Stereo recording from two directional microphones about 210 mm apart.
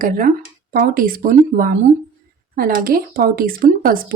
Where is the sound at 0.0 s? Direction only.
40° right (ahead or behind).